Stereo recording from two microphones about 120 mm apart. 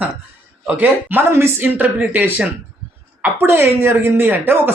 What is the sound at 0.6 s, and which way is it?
A woman's voice, 15° right (ahead or behind).